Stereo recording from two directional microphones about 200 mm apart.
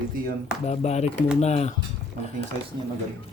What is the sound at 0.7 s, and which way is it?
Speech, 30° left (ahead or behind).